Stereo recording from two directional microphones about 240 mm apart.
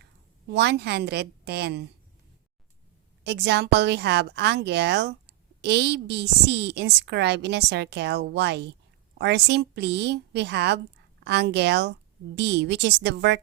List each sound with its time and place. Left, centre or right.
0.5 s a woman's voice: right
3.2 s a woman's voice: right